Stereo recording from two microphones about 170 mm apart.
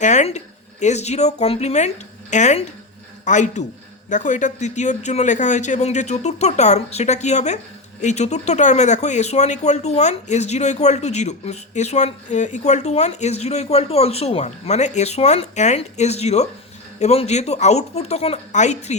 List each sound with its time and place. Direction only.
0.0 s speech: 45° left (ahead or behind)